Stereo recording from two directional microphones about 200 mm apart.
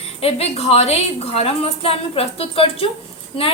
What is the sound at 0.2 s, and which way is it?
A woman's voice, 30° left (ahead or behind).